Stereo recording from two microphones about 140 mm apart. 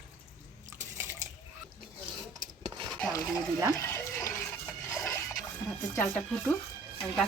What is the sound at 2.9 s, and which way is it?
Stir, 5° left (ahead or behind).